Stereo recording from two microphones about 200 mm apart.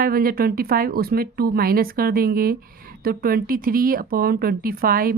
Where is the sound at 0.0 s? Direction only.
45° right (ahead or behind).